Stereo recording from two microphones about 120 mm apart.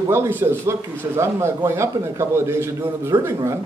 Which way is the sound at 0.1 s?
20° right (ahead or behind).